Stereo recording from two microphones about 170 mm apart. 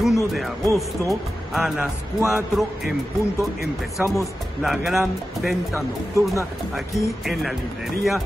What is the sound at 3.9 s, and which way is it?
A man's voice, centre (ahead or behind).